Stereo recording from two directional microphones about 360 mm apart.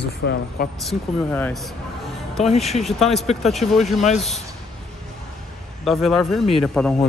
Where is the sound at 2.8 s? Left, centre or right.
Centre.